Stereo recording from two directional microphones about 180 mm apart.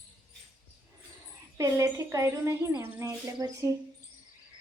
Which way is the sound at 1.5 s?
20° right (ahead or behind).